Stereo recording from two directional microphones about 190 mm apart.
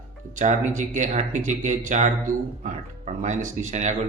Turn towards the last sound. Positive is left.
turn(degrees=-40)  # may be behind; listen again after turning